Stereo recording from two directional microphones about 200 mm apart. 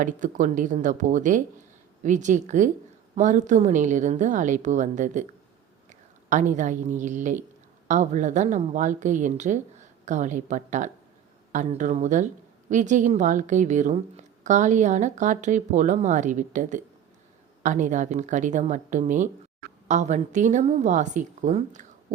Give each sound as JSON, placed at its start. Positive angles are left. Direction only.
{"t": 0.0, "sound": "a woman's voice", "side_deg": -40}